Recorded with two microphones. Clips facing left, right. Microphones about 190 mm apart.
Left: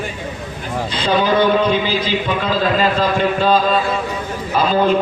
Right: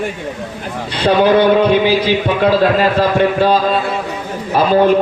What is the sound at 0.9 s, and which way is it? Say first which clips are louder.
A man's voice: right 5 dB; 65° right (ahead or behind).